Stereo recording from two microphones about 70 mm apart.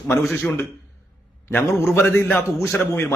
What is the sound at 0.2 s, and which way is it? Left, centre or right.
Speech, centre.